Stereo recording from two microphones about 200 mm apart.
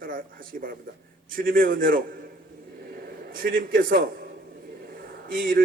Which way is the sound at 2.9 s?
50° right (ahead or behind).